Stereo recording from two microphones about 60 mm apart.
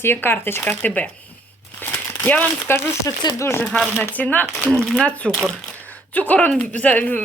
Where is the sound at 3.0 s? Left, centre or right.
Left.